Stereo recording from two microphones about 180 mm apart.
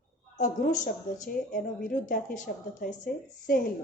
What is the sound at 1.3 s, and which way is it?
Speech, 50° left (ahead or behind).